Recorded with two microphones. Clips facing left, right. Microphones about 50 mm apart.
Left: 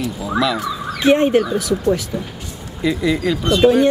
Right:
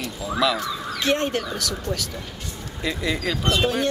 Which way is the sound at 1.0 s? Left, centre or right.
Centre.